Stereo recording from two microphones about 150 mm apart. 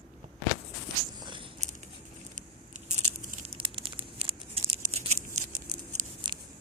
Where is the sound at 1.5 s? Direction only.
50° right (ahead or behind).